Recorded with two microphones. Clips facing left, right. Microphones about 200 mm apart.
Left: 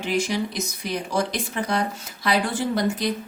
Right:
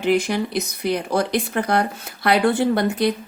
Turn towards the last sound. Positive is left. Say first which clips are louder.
# right 5 dB
turn(degrees=-60)  # may be behind; listen again after turning